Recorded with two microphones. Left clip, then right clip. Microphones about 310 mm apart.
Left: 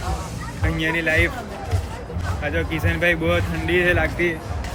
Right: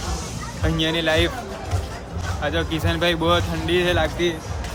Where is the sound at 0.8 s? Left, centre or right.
Centre.